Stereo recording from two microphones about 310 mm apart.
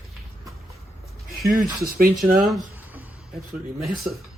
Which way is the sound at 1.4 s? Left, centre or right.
Right.